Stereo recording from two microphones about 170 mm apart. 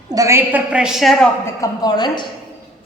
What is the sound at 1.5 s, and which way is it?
Speech, 20° left (ahead or behind).